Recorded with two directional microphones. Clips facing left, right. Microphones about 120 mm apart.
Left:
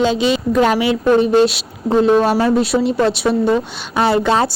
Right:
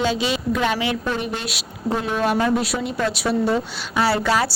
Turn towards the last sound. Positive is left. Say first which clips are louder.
# left 5 dB
turn(degrees=25)  # may be behind; listen again after turning